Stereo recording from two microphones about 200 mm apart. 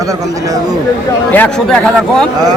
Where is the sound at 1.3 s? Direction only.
5° left (ahead or behind).